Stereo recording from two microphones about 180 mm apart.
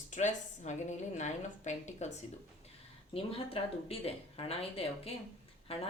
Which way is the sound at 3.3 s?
35° left (ahead or behind).